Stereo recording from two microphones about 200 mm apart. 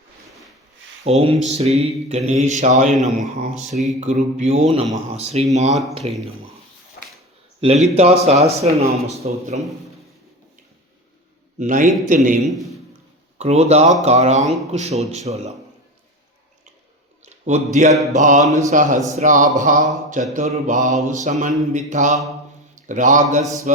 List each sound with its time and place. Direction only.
1.1 s a man's voice: 30° right (ahead or behind)
7.6 s a man's voice: 30° right (ahead or behind)
11.6 s a man's voice: 40° right (ahead or behind)
12.5 s a man's voice: centre (ahead or behind)
13.4 s a man's voice: 30° right (ahead or behind)
17.2 s a man's voice: 35° right (ahead or behind)